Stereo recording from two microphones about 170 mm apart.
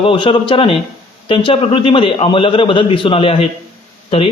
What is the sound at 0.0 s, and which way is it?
A man's voice, 30° left (ahead or behind).